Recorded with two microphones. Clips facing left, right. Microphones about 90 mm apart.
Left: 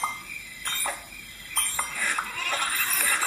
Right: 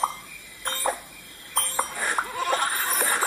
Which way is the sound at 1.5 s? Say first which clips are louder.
Right 5 dB; 45° right (ahead or behind).